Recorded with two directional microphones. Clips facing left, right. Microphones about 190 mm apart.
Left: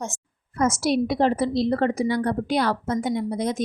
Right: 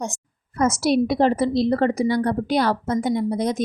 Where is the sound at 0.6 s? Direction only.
40° right (ahead or behind).